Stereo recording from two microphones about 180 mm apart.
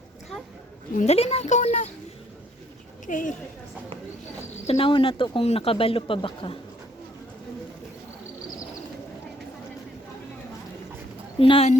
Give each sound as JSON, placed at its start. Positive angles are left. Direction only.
{"t": 0.9, "sound": "a woman's voice", "side_deg": 35}
{"t": 3.1, "sound": "a woman's voice", "side_deg": 45}
{"t": 4.6, "sound": "speech", "side_deg": 30}
{"t": 11.3, "sound": "a woman's voice", "side_deg": 30}